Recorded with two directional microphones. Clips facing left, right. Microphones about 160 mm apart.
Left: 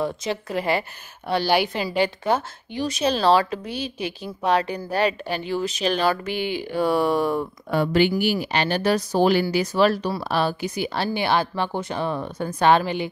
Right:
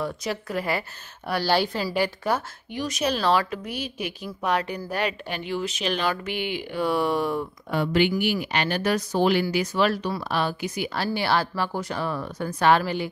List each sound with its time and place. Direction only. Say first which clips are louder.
0.0 s a woman's voice: left 3 dB; 20° left (ahead or behind)